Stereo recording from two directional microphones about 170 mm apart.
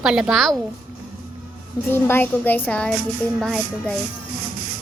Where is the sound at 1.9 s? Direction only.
15° left (ahead or behind).